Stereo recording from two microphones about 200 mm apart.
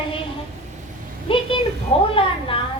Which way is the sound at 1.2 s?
25° left (ahead or behind).